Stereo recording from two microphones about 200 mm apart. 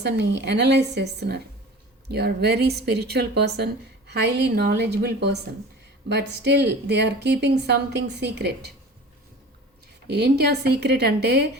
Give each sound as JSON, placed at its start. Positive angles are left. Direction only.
{"t": 0.0, "sound": "a woman's voice", "side_deg": -55}
{"t": 10.1, "sound": "speech", "side_deg": -55}